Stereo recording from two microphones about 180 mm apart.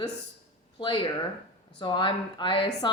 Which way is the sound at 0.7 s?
25° left (ahead or behind).